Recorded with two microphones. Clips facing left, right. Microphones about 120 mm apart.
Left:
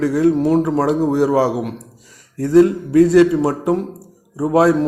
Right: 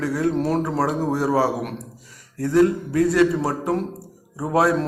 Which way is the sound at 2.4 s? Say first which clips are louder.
Left 5 dB; 25° left (ahead or behind).